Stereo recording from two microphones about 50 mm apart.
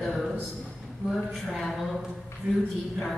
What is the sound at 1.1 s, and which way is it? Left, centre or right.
Speech, centre.